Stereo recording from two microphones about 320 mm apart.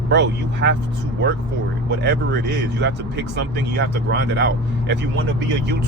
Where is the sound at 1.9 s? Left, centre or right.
Right.